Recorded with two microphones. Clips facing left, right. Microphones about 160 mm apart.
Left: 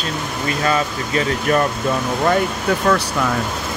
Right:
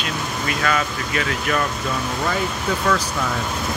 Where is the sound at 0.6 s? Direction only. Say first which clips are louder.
Left 3 dB; 30° left (ahead or behind).